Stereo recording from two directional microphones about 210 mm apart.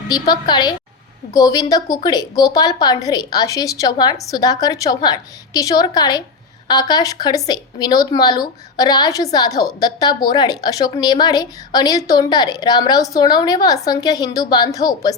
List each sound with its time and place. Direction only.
0.1 s a woman's voice: 20° left (ahead or behind)